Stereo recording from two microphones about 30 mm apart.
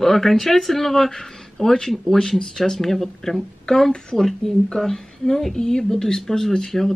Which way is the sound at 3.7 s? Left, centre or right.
Left.